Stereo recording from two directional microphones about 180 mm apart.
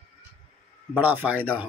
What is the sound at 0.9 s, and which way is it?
Speech, 10° right (ahead or behind).